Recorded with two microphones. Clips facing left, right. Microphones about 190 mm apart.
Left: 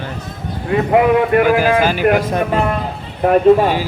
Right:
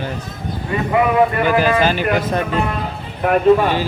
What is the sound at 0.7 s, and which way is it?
Speech, 70° left (ahead or behind).